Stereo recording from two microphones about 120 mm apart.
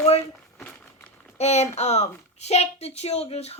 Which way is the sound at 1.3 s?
65° left (ahead or behind).